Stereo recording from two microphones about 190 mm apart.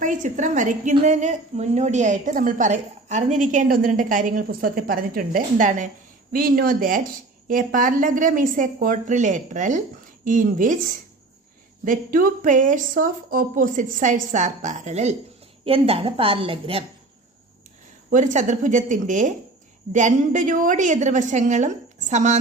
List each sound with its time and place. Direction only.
0.0 s a woman's voice: 40° right (ahead or behind)
11.9 s a woman's voice: 45° right (ahead or behind); by 16.8 s 30° right (ahead or behind)
18.1 s a woman's voice: 40° right (ahead or behind)